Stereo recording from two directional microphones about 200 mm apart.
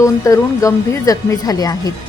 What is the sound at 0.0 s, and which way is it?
A woman's voice, 15° left (ahead or behind).